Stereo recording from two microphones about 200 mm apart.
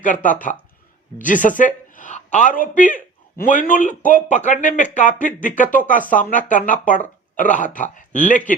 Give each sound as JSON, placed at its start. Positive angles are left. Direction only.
{"t": 0.0, "sound": "a man's voice", "side_deg": 40}